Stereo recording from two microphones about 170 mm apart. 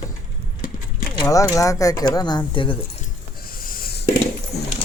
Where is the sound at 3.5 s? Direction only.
60° left (ahead or behind).